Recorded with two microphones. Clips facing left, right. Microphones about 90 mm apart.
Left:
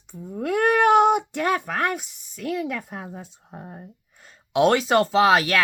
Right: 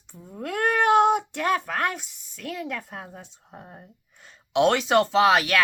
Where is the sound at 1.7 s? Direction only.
5° left (ahead or behind).